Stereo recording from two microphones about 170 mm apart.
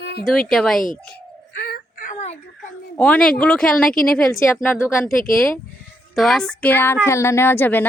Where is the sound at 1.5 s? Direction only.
65° left (ahead or behind); by 2.4 s 45° left (ahead or behind).